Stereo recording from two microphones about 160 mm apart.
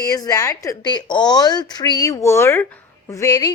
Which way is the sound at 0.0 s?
25° left (ahead or behind).